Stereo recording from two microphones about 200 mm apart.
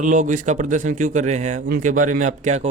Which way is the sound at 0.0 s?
40° right (ahead or behind).